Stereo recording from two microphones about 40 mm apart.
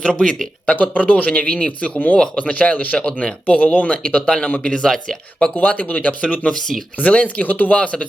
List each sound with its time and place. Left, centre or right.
0.0 s speech: left
0.7 s speech: left
4.6 s speech: centre
5.5 s speech: left
6.5 s speech: centre
7.0 s speech: left
7.4 s speech: left